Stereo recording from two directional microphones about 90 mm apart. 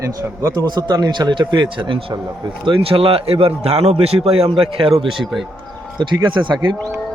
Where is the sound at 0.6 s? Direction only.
50° right (ahead or behind); by 2.2 s 65° right (ahead or behind).